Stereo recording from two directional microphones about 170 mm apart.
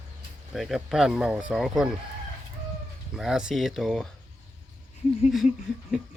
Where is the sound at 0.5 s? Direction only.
Centre (ahead or behind).